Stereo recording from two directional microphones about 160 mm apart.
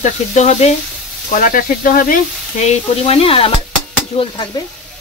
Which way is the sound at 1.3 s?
60° left (ahead or behind).